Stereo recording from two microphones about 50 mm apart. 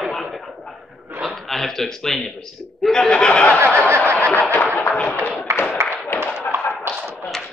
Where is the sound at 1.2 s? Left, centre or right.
Centre; by 3.5 s left.